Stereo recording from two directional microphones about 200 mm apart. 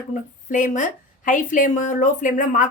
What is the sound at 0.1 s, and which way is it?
A woman's voice, 40° left (ahead or behind).